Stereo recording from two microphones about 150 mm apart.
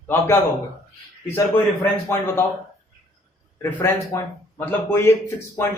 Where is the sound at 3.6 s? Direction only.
15° left (ahead or behind).